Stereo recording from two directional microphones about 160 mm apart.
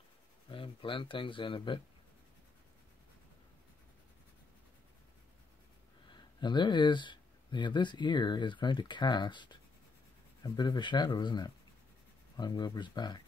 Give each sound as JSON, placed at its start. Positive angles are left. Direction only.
{"t": 0.5, "sound": "speech", "side_deg": 30}
{"t": 6.4, "sound": "speech", "side_deg": 30}